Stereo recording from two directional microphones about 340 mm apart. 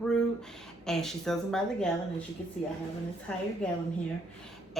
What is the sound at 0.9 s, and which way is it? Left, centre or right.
Speech, centre.